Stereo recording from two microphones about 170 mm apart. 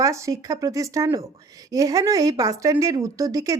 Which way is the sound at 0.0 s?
20° right (ahead or behind).